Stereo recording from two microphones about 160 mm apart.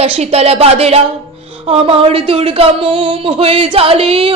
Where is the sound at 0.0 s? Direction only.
40° right (ahead or behind).